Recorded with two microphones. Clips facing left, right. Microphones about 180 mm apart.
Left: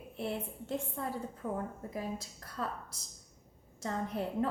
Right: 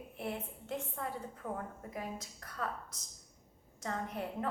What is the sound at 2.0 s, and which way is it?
Speech, 30° left (ahead or behind).